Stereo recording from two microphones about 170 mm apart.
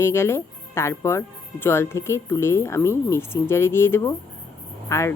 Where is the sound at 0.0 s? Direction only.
15° left (ahead or behind).